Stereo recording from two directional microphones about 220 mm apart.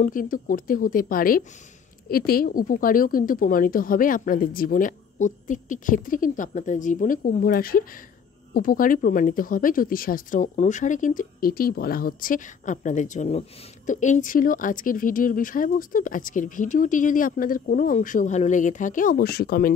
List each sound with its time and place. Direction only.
0.0 s speech: 40° left (ahead or behind)